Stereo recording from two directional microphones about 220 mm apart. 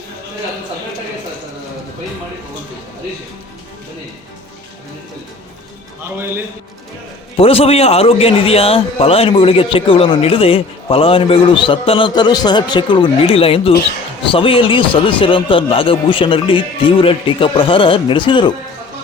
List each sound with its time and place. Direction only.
6.1 s a man's voice: 10° right (ahead or behind)
7.3 s a man's voice: 25° left (ahead or behind)